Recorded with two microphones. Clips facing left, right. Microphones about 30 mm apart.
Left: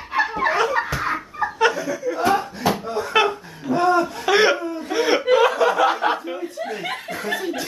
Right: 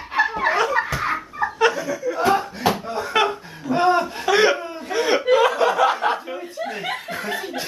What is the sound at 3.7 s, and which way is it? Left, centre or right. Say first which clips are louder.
Chuckle: even; right.